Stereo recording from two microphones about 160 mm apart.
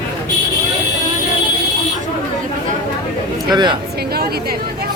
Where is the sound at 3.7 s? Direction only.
75° right (ahead or behind).